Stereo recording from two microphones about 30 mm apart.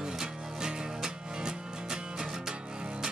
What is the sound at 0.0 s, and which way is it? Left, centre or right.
Music, right.